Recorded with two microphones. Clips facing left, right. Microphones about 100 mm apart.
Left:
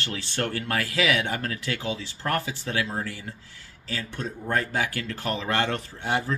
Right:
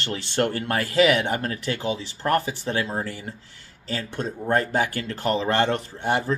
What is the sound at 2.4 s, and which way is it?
Speech, 35° right (ahead or behind).